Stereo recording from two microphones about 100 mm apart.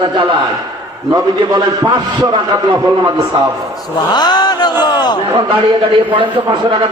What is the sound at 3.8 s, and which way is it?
Speech, 45° left (ahead or behind).